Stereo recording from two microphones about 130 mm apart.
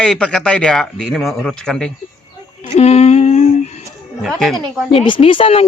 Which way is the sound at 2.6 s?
55° left (ahead or behind).